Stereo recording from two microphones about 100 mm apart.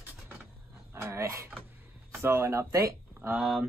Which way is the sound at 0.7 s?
30° right (ahead or behind).